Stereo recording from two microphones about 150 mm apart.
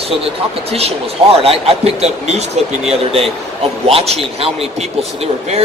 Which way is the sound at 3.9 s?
40° right (ahead or behind).